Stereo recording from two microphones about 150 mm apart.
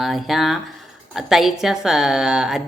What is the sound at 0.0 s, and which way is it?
A woman's voice, centre (ahead or behind).